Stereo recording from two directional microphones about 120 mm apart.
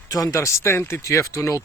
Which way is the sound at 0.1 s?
30° left (ahead or behind).